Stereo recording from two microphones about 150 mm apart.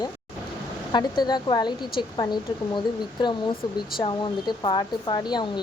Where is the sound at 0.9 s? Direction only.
30° left (ahead or behind).